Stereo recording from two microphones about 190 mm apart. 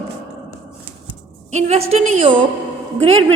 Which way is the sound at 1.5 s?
35° right (ahead or behind).